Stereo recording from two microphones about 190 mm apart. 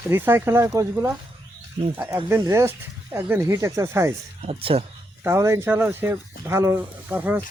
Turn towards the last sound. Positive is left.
turn(degrees=-10)  # may be behind; listen again after turning